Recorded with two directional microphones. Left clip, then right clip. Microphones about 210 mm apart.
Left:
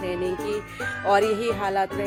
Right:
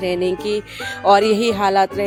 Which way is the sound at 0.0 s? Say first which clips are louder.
Right 7 dB; 50° right (ahead or behind).